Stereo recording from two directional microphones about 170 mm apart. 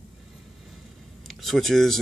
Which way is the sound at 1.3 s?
Centre (ahead or behind).